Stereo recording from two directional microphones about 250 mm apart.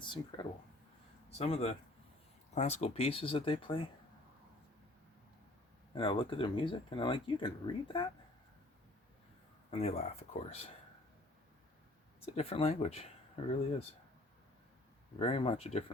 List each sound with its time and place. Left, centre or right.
0.0 s speech: centre
5.9 s speech: centre
9.7 s speech: left
12.2 s speech: left
15.2 s speech: left